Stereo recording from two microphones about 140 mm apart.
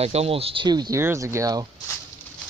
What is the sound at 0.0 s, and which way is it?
Speech, 45° right (ahead or behind).